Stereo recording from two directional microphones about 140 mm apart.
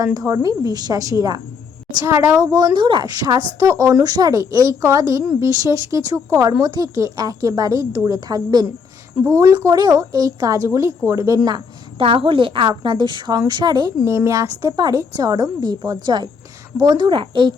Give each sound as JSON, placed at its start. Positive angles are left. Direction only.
{"t": 0.0, "sound": "a woman's voice", "side_deg": -25}
{"t": 11.4, "sound": "a woman's voice", "side_deg": -35}
{"t": 14.0, "sound": "a woman's voice", "side_deg": -20}